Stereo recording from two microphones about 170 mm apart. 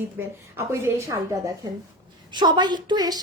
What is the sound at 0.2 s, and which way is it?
A woman's voice, 10° right (ahead or behind).